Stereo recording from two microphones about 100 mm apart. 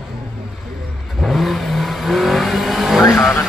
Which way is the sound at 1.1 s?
Centre (ahead or behind).